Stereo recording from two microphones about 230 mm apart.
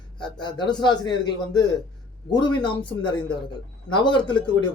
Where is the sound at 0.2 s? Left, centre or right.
Centre.